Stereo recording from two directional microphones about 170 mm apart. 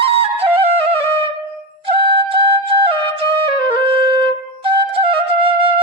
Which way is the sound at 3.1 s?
30° right (ahead or behind).